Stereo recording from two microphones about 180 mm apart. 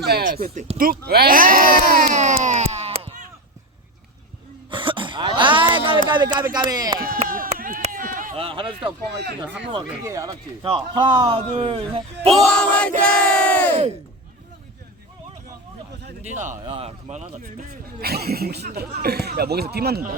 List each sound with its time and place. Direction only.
0.0 s speech: 60° right (ahead or behind)
0.3 s speech: 50° right (ahead or behind)
4.7 s a sound: 30° right (ahead or behind)
6.1 s a man's voice: 25° right (ahead or behind)
7.3 s a sound: 50° right (ahead or behind)
7.8 s run: 50° right (ahead or behind)
8.4 s a man's voice: 30° right (ahead or behind)
10.0 s a man's voice: 15° right (ahead or behind)
12.3 s a sound: 5° left (ahead or behind)
13.2 s crowd: 5° left (ahead or behind)
16.2 s speech: 40° right (ahead or behind)
18.0 s speech: 60° right (ahead or behind)